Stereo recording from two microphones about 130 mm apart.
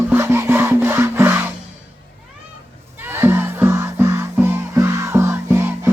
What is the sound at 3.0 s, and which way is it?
Music, 15° right (ahead or behind).